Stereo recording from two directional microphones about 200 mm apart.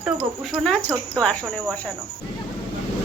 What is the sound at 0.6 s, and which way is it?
Speech, 5° left (ahead or behind).